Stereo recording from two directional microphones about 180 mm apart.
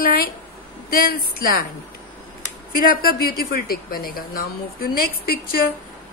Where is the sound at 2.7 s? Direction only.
55° left (ahead or behind).